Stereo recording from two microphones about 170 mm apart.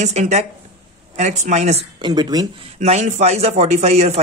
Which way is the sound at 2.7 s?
40° right (ahead or behind).